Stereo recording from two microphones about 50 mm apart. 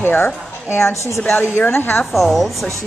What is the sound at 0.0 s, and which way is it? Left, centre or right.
Speech, left.